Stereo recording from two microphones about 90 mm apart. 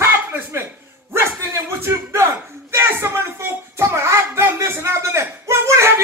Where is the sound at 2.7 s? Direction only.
30° right (ahead or behind).